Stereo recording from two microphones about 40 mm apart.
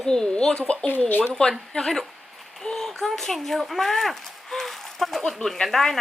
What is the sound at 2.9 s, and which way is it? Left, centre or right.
A woman's voice, centre.